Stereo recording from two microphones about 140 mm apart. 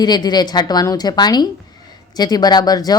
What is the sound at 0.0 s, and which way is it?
A woman's voice, 30° left (ahead or behind).